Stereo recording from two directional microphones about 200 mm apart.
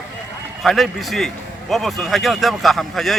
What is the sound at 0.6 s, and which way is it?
Speech, centre (ahead or behind).